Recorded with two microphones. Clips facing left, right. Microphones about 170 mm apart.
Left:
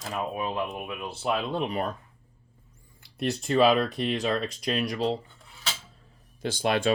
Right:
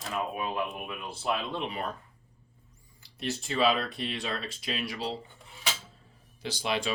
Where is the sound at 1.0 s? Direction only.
25° left (ahead or behind).